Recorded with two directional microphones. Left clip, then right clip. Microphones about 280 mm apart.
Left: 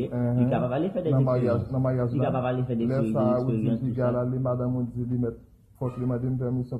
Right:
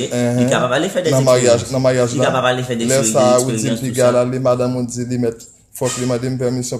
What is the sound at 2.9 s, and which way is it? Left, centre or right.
Speech, right.